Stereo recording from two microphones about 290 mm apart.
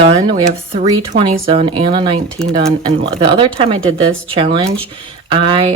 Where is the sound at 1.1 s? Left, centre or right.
Right.